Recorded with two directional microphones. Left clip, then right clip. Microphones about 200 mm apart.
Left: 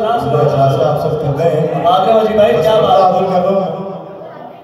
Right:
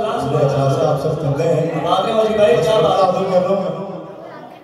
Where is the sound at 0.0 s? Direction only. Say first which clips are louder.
Left 5 dB; 35° left (ahead or behind).